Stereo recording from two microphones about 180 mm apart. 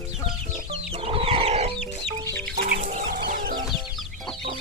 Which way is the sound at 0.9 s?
35° right (ahead or behind).